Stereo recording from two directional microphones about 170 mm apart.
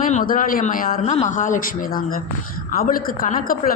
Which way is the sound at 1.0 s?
40° left (ahead or behind).